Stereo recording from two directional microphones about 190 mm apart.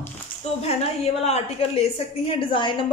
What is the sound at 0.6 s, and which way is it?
A woman's voice, 35° left (ahead or behind).